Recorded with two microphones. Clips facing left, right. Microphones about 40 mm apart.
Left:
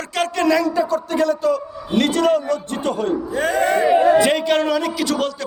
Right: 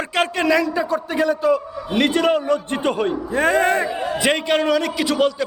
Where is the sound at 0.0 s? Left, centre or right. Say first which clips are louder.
Right 2 dB; right.